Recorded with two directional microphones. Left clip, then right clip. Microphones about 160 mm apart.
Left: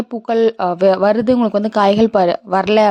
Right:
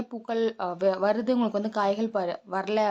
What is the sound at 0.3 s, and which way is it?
A woman's voice, 45° left (ahead or behind).